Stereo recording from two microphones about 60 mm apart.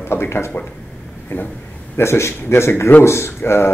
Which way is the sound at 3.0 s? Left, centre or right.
Left.